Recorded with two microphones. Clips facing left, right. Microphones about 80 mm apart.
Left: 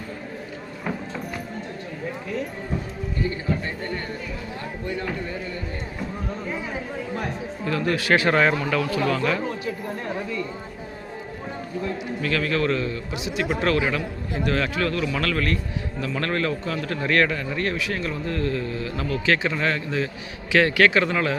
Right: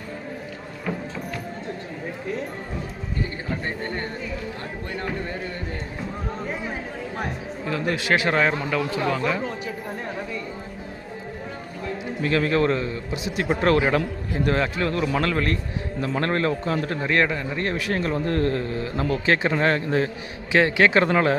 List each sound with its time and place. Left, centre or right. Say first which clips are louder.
7.6 s speech: left 1 dB; centre
8.3 s speech: left 2 dB; centre
8.7 s speech: left 1 dB; centre
12.2 s a man's voice: right 3 dB; right
13.2 s speech: left 1 dB; right
13.5 s a man's voice: right 4 dB; right
17.0 s a man's voice: left 3 dB; centre
17.7 s speech: right 3 dB; right
20.5 s a man's voice: even; right
20.9 s speech: right 3 dB; right